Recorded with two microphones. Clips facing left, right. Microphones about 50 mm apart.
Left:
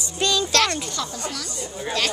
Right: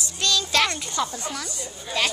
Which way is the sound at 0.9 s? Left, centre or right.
Centre.